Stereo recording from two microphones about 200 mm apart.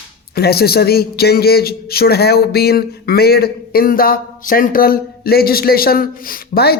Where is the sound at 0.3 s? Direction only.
50° left (ahead or behind).